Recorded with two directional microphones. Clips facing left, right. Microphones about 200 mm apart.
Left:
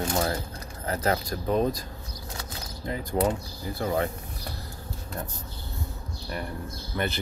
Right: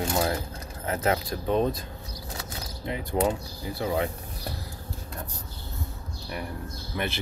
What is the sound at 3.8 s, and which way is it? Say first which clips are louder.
Speech: even; 5° right (ahead or behind).